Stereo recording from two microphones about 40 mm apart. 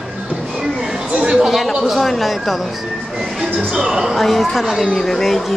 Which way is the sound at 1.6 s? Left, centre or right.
Centre.